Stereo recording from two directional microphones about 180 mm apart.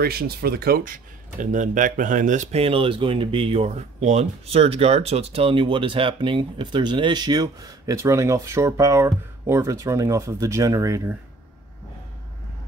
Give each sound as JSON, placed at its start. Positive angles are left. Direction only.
{"t": 0.0, "sound": "speech", "side_deg": -60}